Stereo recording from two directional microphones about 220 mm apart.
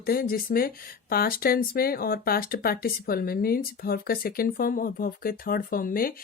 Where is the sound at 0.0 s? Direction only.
45° left (ahead or behind).